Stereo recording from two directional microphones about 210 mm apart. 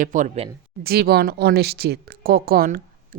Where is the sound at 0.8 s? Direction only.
50° right (ahead or behind).